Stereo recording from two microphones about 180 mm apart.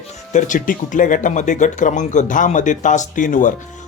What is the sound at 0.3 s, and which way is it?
Speech, 45° left (ahead or behind).